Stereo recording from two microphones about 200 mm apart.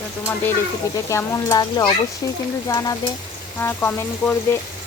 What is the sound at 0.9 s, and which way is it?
Speech, 15° left (ahead or behind).